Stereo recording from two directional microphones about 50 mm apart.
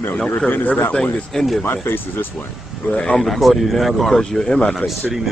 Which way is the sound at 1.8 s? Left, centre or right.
Left.